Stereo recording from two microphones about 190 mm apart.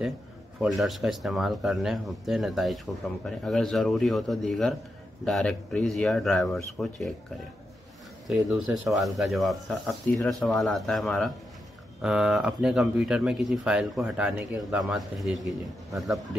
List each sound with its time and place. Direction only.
0.6 s a man's voice: centre (ahead or behind)
8.3 s a man's voice: centre (ahead or behind)